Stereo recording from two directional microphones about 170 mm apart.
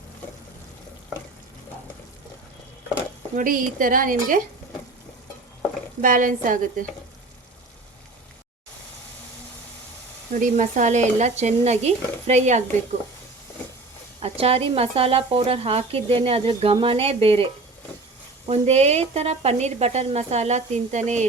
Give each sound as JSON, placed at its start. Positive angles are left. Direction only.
{"t": 3.3, "sound": "speech", "side_deg": -55}
{"t": 6.0, "sound": "speech", "side_deg": -50}
{"t": 10.3, "sound": "speech", "side_deg": -50}
{"t": 14.2, "sound": "speech", "side_deg": -35}